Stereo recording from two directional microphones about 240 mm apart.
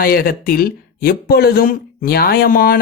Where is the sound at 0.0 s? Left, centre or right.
Left.